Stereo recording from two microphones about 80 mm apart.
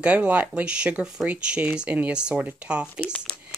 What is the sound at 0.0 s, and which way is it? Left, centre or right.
Speech, centre.